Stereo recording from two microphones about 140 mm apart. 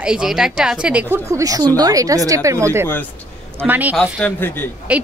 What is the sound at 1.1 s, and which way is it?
A woman's voice, 25° right (ahead or behind).